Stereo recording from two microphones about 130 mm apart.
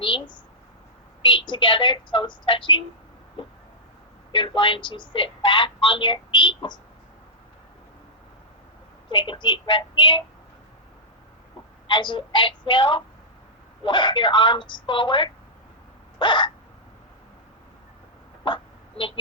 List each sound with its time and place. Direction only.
0.0 s a woman's voice: 35° left (ahead or behind)
4.3 s a woman's voice: 40° left (ahead or behind)
9.0 s a woman's voice: 40° left (ahead or behind)
11.9 s a woman's voice: 35° left (ahead or behind)
18.4 s a sound: 40° left (ahead or behind)